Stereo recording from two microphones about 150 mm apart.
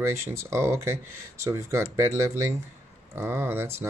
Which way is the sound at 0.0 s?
20° right (ahead or behind).